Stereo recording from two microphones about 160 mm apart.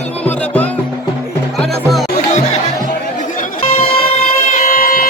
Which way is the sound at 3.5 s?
35° left (ahead or behind).